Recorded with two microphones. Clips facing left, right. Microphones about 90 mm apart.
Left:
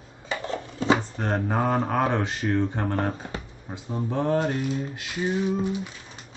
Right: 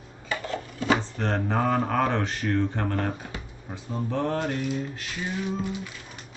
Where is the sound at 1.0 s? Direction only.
15° left (ahead or behind).